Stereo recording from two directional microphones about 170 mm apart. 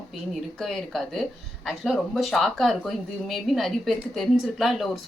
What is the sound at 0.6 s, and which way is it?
Speech, centre (ahead or behind).